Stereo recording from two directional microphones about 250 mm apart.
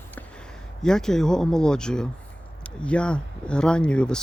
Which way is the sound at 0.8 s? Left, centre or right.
Centre.